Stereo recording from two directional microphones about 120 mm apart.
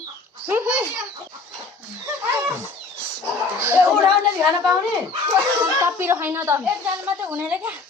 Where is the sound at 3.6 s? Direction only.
15° right (ahead or behind).